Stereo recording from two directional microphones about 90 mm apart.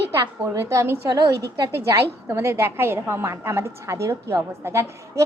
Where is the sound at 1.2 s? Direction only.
50° right (ahead or behind).